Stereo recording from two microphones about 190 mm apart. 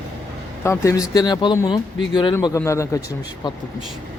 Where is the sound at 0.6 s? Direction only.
15° left (ahead or behind).